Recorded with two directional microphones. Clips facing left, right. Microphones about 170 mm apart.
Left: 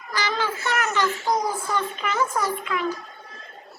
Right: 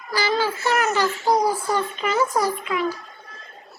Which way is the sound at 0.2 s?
35° right (ahead or behind).